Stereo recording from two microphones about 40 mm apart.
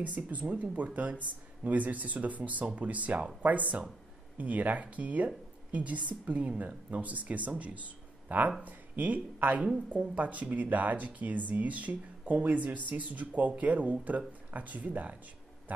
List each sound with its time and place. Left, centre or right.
0.0 s speech: right